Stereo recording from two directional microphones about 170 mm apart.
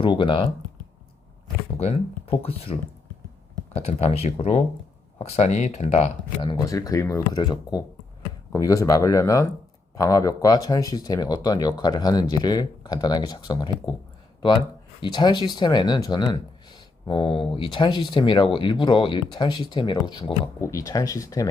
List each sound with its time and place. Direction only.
0.0 s speech: 30° left (ahead or behind)
1.8 s speech: 35° left (ahead or behind)
3.8 s speech: 40° left (ahead or behind)
6.4 s speech: 25° left (ahead or behind)
15.0 s speech: 30° left (ahead or behind)
20.6 s speech: 15° left (ahead or behind)